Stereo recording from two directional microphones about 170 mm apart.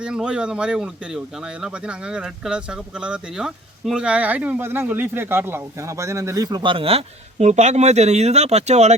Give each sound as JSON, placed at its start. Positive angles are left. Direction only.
{"t": 0.0, "sound": "speech", "side_deg": -5}